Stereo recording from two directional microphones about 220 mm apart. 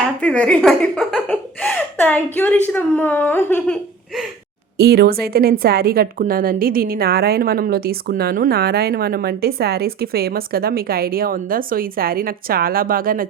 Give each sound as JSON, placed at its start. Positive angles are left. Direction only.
{"t": 0.2, "sound": "speech", "side_deg": 5}
{"t": 4.8, "sound": "a woman's voice", "side_deg": -45}